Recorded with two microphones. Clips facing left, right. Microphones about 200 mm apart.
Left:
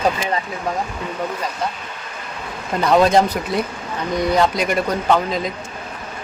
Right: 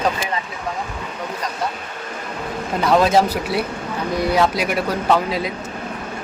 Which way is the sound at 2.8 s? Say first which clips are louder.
Left 1 dB; centre (ahead or behind).